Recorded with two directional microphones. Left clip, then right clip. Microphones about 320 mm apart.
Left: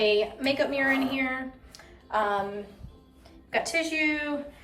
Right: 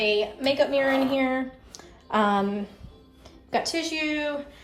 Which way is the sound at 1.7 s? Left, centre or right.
Right.